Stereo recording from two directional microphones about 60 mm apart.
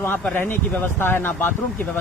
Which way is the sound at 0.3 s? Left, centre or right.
Left.